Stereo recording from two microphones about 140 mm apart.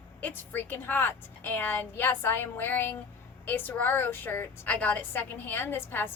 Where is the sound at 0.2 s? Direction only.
15° left (ahead or behind).